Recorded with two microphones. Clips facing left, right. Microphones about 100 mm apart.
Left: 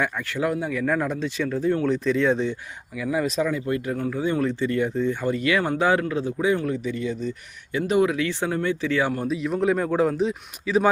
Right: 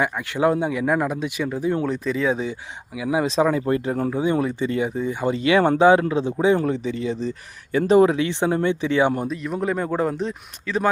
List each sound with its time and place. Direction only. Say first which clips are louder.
0.0 s speech: right 4 dB; 20° right (ahead or behind)
1.9 s speech: left 1 dB; 5° right (ahead or behind)
3.1 s speech: right 3 dB; 25° right (ahead or behind)
3.4 s speech: right 5 dB; 40° right (ahead or behind)
3.8 s speech: right 3 dB; 30° right (ahead or behind)
4.1 s speech: right 1 dB; 20° right (ahead or behind); by 8.2 s 35° right (ahead or behind)
8.2 s speech: right 4 dB; 20° right (ahead or behind)
9.2 s speech: left 2 dB; centre (ahead or behind)